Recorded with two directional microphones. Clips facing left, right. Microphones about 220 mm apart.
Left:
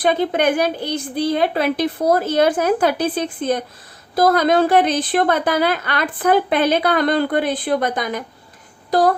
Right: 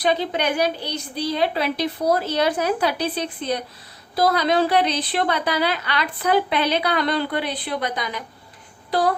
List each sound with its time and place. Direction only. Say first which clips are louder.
0.0 s a woman's voice: left 5 dB; 50° left (ahead or behind)